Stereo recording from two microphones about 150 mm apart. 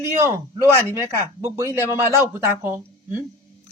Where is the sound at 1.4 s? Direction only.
20° right (ahead or behind).